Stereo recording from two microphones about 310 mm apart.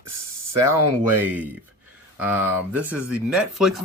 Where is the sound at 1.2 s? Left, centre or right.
Centre.